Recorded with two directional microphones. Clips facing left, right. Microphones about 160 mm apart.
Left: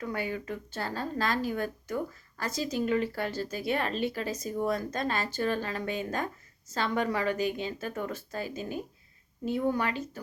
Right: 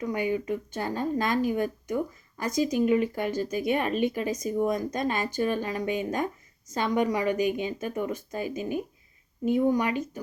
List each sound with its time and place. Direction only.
0.0 s a woman's voice: 15° right (ahead or behind)